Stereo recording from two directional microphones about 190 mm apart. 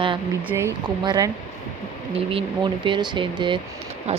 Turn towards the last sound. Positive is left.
turn(degrees=-35)  # may be behind; listen again after turning